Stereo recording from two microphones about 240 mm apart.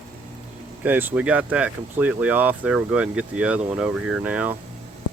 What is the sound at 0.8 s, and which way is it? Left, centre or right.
Speech, centre.